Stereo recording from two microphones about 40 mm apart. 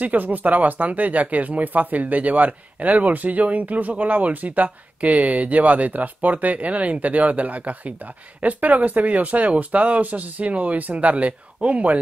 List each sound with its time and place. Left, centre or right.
0.0 s speech: right